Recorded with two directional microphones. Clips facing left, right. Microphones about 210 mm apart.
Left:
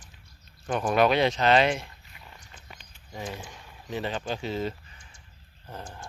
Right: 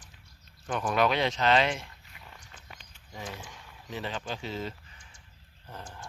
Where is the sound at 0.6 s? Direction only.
35° left (ahead or behind).